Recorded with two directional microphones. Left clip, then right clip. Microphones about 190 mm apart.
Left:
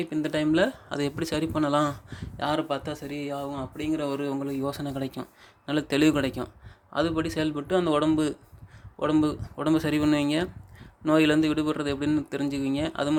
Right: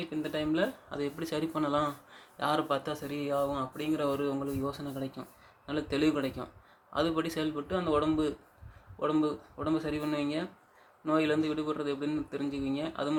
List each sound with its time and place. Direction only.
0.1 s speech: 45° left (ahead or behind)
2.4 s speech: 25° left (ahead or behind); by 6.5 s 45° left (ahead or behind)
6.9 s speech: 30° left (ahead or behind); by 13.1 s 45° left (ahead or behind)